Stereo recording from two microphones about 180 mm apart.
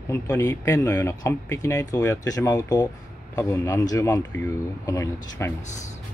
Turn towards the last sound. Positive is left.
turn(degrees=15)  # may be behind; listen again after turning